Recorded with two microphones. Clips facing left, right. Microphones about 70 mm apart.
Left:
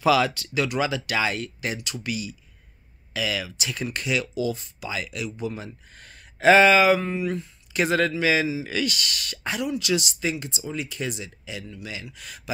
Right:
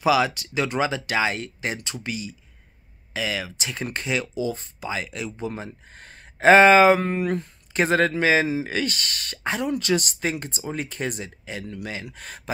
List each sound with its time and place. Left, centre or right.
0.0 s speech: centre
7.0 s speech: right
7.7 s a man's voice: right
11.6 s speech: right
11.9 s speech: right